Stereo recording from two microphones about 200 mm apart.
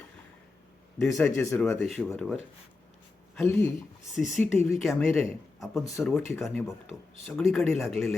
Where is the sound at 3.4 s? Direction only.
10° left (ahead or behind).